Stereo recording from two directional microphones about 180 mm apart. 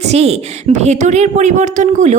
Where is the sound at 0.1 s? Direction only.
35° right (ahead or behind).